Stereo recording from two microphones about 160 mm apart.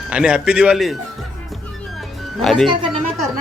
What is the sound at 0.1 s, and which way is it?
Speech, 5° right (ahead or behind).